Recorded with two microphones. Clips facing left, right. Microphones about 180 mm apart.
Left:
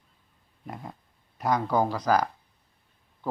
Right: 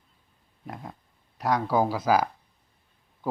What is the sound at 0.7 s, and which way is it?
Speech, centre (ahead or behind).